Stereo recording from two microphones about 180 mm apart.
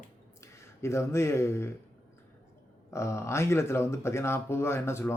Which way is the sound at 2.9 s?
15° left (ahead or behind).